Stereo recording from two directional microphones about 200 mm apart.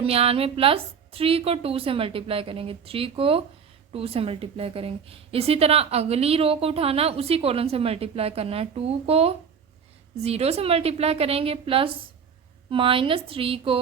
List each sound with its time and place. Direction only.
0.0 s a woman's voice: 30° right (ahead or behind)